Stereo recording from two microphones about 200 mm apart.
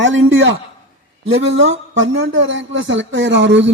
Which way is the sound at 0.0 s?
70° right (ahead or behind).